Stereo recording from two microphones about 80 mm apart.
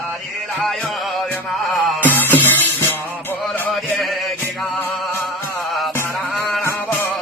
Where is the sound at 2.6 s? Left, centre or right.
Left.